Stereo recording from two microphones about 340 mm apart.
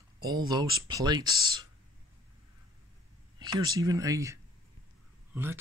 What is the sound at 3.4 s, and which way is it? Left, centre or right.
Speech, centre.